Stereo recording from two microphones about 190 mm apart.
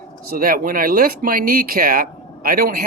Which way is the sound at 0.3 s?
50° right (ahead or behind).